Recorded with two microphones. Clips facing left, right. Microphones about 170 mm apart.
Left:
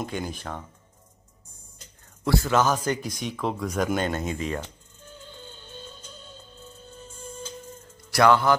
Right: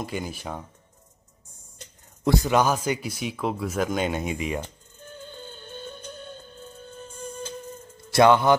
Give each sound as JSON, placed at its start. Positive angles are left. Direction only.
{"t": 0.0, "sound": "speech", "side_deg": -5}
{"t": 2.2, "sound": "speech", "side_deg": -15}
{"t": 5.4, "sound": "music", "side_deg": -55}
{"t": 8.1, "sound": "a man's voice", "side_deg": -20}